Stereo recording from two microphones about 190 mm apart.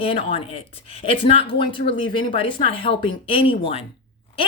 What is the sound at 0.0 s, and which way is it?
A woman's voice, 30° left (ahead or behind).